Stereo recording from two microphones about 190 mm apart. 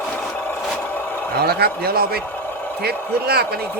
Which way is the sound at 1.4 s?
55° right (ahead or behind).